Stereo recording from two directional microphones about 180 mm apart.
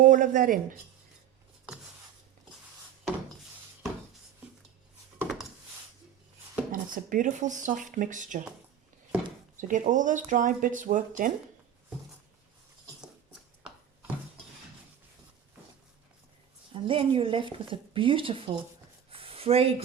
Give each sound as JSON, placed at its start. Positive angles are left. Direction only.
{"t": 0.0, "sound": "speech", "side_deg": -45}
{"t": 5.2, "sound": "a sound", "side_deg": 0}
{"t": 6.7, "sound": "speech", "side_deg": -50}
{"t": 9.6, "sound": "speech", "side_deg": -45}
{"t": 16.7, "sound": "speech", "side_deg": -30}
{"t": 19.1, "sound": "a sound", "side_deg": -30}